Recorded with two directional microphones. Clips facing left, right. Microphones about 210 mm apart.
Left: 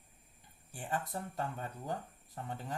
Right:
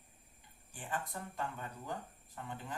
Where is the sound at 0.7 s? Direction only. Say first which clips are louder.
Left 3 dB; 40° left (ahead or behind).